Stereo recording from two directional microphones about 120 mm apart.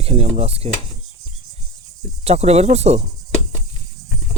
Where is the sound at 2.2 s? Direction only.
60° right (ahead or behind).